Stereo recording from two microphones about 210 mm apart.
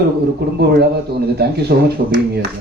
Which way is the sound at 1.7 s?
50° right (ahead or behind).